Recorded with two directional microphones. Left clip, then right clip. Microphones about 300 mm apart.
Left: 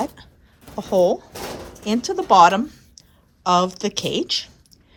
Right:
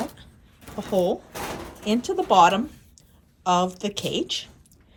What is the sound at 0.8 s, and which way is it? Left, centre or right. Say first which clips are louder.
A woman's voice: left 6 dB; centre.